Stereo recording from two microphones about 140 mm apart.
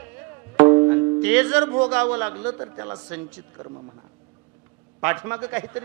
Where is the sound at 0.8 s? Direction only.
25° right (ahead or behind).